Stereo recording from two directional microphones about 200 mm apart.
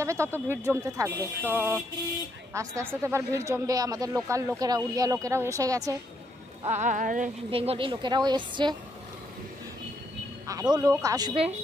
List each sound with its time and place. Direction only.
0.0 s speech: 15° right (ahead or behind)
6.6 s speech: 35° right (ahead or behind)
7.5 s a woman's voice: 30° right (ahead or behind)
10.4 s speech: 20° right (ahead or behind)